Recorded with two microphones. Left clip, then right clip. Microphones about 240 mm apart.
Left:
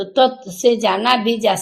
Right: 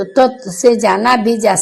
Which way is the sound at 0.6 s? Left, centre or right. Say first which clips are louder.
Right 4 dB; centre.